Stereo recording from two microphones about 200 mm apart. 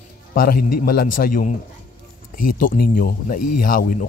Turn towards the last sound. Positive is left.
turn(degrees=45)  # may be behind; listen again after turning